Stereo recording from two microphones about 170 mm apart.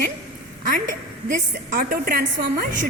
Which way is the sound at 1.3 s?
55° right (ahead or behind).